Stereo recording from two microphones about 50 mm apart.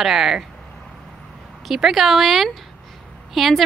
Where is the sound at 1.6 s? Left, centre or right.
Centre.